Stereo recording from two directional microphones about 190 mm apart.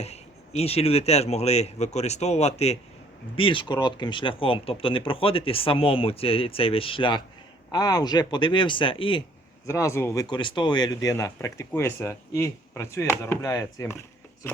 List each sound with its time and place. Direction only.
0.0 s speech: 35° left (ahead or behind)
9.6 s speech: 15° left (ahead or behind)